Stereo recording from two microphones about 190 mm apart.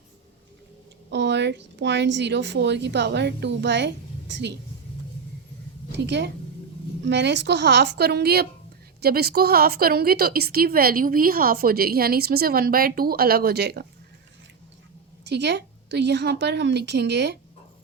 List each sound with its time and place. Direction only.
1.1 s speech: 65° right (ahead or behind)
6.1 s speech: 65° right (ahead or behind)
15.2 s speech: 65° right (ahead or behind)